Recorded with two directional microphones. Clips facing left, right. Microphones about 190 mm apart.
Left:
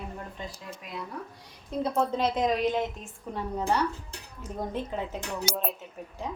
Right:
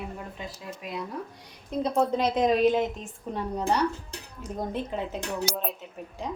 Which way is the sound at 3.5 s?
15° right (ahead or behind).